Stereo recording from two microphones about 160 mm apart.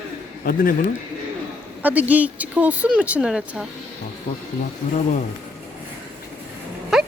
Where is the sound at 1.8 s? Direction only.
10° right (ahead or behind).